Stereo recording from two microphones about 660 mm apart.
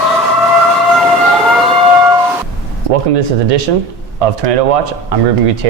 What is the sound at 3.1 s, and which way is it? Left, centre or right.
Speech, right.